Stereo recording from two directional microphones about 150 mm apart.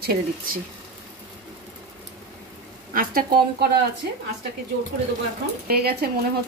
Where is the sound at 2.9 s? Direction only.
70° right (ahead or behind).